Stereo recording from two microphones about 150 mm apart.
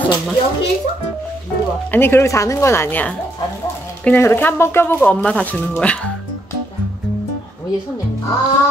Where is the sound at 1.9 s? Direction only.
15° left (ahead or behind).